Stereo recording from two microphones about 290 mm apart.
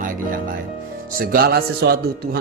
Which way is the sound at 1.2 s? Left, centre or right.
Right.